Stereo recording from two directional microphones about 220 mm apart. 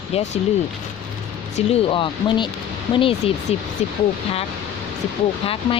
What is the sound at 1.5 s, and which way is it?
Speech, 25° left (ahead or behind).